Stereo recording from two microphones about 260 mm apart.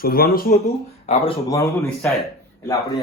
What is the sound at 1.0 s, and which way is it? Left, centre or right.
A man's voice, left.